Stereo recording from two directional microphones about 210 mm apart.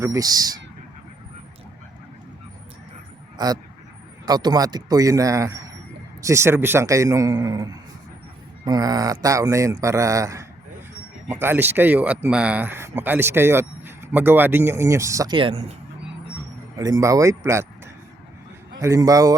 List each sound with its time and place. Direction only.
0.0 s speech: 15° right (ahead or behind)
3.3 s speech: 20° right (ahead or behind)
16.7 s speech: 15° right (ahead or behind)
18.8 s speech: 15° right (ahead or behind)